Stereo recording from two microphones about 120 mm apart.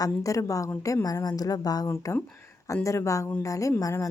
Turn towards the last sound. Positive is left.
turn(degrees=30)  # may be behind; listen again after turning